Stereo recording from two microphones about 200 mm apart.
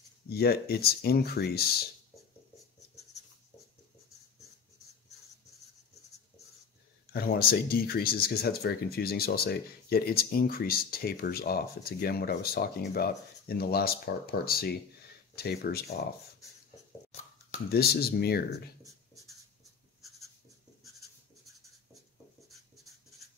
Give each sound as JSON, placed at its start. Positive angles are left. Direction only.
{"t": 0.3, "sound": "speech", "side_deg": 50}
{"t": 7.1, "sound": "speech", "side_deg": 50}
{"t": 17.6, "sound": "speech", "side_deg": 50}